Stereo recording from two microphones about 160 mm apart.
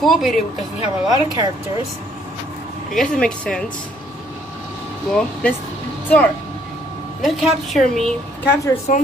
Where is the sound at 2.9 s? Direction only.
5° left (ahead or behind).